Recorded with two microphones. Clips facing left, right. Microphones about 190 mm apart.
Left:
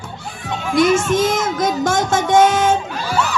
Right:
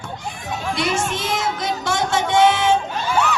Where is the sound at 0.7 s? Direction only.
45° left (ahead or behind).